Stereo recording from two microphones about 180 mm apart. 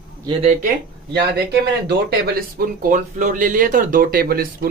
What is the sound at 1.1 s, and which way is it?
Speech, 65° right (ahead or behind).